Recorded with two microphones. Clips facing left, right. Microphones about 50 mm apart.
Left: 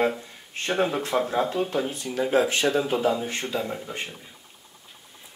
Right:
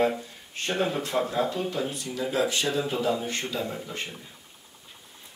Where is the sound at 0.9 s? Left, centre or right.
Left.